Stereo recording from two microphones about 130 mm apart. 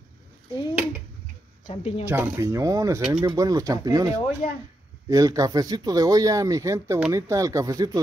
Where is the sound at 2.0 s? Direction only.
15° right (ahead or behind).